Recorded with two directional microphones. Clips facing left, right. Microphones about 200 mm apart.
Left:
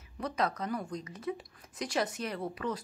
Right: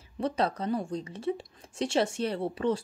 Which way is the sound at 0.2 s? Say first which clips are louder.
Right 4 dB; 30° right (ahead or behind).